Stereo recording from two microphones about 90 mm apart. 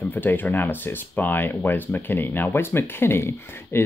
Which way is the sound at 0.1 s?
20° left (ahead or behind).